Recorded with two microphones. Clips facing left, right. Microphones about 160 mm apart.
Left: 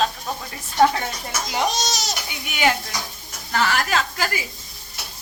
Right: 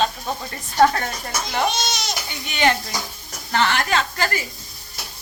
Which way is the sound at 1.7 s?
40° left (ahead or behind).